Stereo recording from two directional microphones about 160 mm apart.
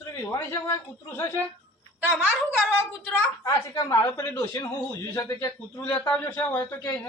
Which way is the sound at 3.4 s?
20° left (ahead or behind).